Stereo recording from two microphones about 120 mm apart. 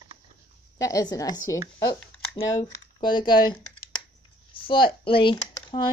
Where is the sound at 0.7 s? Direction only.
30° left (ahead or behind).